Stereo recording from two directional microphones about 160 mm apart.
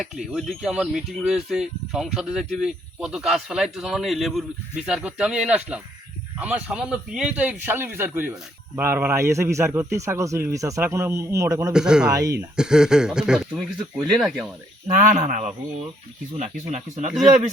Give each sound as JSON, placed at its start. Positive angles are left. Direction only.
{"t": 0.0, "sound": "a man's voice", "side_deg": 0}
{"t": 11.7, "sound": "speech", "side_deg": -5}
{"t": 12.1, "sound": "speech", "side_deg": -20}
{"t": 12.5, "sound": "speech", "side_deg": -5}
{"t": 14.8, "sound": "speech", "side_deg": -50}